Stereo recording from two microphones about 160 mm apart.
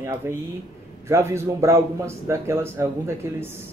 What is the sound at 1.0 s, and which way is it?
Speech, 15° right (ahead or behind).